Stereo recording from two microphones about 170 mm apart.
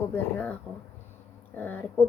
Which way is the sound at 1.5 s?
10° left (ahead or behind).